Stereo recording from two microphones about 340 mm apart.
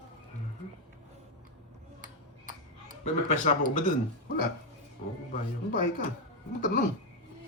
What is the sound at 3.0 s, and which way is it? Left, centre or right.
Speech, left.